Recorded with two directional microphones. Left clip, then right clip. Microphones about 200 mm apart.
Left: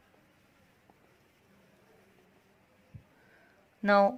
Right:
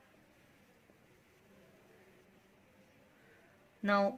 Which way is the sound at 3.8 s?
30° left (ahead or behind).